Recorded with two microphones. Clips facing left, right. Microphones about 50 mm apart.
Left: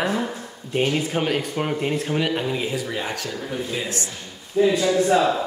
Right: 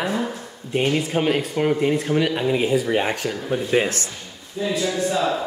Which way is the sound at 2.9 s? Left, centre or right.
Right.